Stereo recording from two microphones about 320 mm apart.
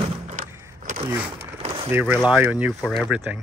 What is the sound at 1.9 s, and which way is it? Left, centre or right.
Speech, centre.